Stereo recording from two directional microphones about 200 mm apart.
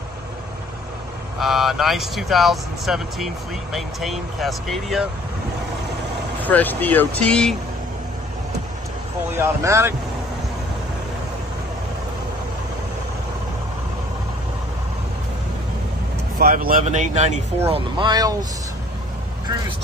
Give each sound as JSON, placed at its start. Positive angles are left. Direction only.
{"t": 1.4, "sound": "speech", "side_deg": 0}
{"t": 6.4, "sound": "speech", "side_deg": 10}
{"t": 9.4, "sound": "speech", "side_deg": -15}
{"t": 16.3, "sound": "speech", "side_deg": -45}
{"t": 17.6, "sound": "speech", "side_deg": -25}